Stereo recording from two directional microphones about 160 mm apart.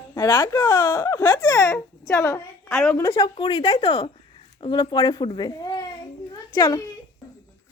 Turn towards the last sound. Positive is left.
turn(degrees=25)  # may be behind; listen again after turning